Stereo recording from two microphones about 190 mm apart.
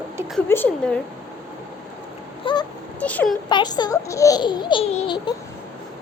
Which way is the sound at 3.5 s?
20° left (ahead or behind).